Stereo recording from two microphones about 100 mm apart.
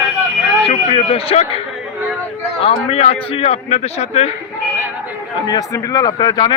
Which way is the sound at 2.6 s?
80° left.